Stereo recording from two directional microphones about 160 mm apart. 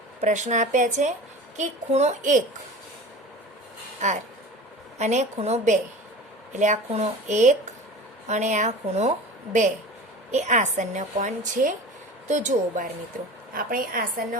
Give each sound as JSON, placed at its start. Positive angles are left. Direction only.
{"t": 0.2, "sound": "a woman's voice", "side_deg": -50}
{"t": 4.0, "sound": "a woman's voice", "side_deg": -45}